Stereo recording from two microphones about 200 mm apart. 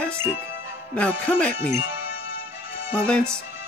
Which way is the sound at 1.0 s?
5° left (ahead or behind).